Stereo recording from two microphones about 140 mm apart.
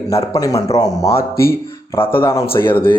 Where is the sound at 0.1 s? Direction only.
25° left (ahead or behind).